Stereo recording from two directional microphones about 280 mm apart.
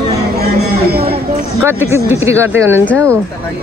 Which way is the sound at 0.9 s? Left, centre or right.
Right.